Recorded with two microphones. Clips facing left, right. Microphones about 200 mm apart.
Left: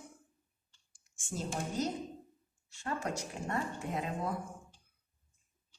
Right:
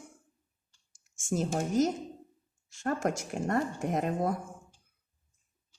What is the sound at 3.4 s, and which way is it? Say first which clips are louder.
Speech: right 7 dB; 45° right (ahead or behind).